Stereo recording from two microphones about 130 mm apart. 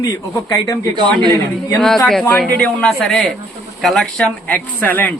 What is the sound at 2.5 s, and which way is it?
A woman's voice, 10° left (ahead or behind).